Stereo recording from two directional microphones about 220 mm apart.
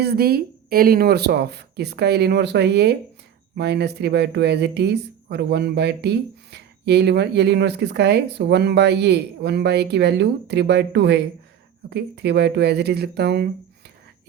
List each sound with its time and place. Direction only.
0.0 s speech: 45° right (ahead or behind)